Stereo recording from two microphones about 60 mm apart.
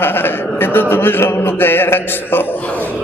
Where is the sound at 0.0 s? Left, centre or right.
Left.